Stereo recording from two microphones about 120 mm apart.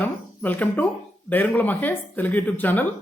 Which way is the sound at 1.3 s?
15° left (ahead or behind).